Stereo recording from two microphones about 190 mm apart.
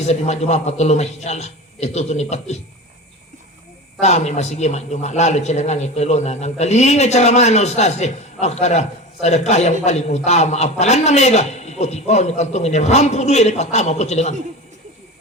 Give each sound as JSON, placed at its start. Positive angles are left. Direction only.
{"t": 0.0, "sound": "speech", "side_deg": 35}
{"t": 4.0, "sound": "speech", "side_deg": 35}